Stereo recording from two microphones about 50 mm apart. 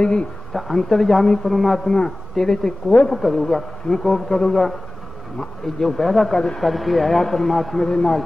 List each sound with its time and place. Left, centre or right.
0.0 s speech: centre
0.5 s speech: centre
1.9 s speech: centre
6.3 s speech: centre
6.6 s speech: centre